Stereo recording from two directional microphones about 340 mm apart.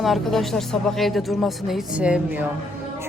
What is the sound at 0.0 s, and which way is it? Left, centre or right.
Speech, centre.